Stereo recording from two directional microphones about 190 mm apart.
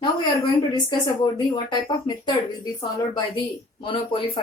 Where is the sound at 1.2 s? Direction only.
25° left (ahead or behind).